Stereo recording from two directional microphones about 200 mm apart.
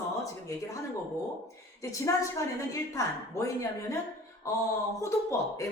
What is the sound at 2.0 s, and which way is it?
Speech, 15° left (ahead or behind).